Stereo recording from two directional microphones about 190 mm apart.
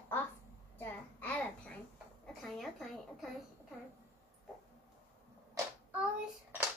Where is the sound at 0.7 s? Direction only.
10° left (ahead or behind).